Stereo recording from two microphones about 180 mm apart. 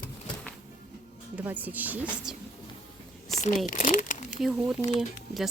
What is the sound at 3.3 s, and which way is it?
Speech, 40° left (ahead or behind).